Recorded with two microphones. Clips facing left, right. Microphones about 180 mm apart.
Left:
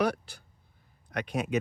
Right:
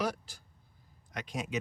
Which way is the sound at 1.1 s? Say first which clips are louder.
Left 7 dB; 60° left (ahead or behind).